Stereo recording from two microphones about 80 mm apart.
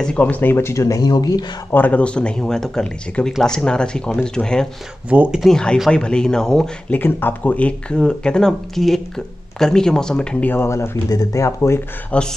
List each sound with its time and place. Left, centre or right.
0.0 s speech: centre; by 1.4 s left
1.7 s speech: left
5.1 s speech: centre
5.4 s speech: centre
6.9 s speech: left; by 10.2 s centre
10.4 s speech: left
11.1 s speech: left
12.1 s speech: centre